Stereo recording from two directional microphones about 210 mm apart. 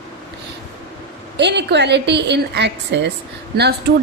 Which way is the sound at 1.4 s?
55° right (ahead or behind).